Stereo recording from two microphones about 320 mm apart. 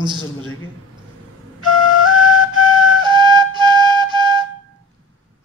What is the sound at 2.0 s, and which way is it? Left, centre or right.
Flute, right.